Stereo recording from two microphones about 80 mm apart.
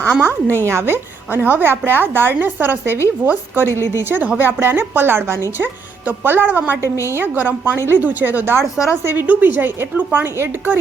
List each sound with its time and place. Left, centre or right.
0.1 s a woman's voice: right